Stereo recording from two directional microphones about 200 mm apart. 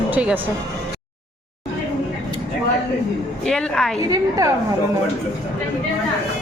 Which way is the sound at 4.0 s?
15° right (ahead or behind).